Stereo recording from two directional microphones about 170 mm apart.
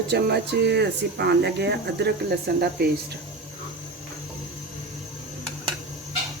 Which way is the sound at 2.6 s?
65° right (ahead or behind).